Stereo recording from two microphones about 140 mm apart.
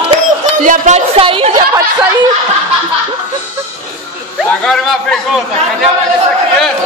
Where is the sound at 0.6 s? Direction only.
60° right (ahead or behind).